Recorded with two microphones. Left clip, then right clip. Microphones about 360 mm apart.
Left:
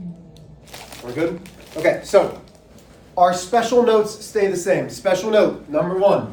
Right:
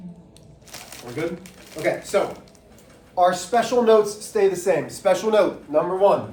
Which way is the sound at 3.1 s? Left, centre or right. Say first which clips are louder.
Left 3 dB; centre.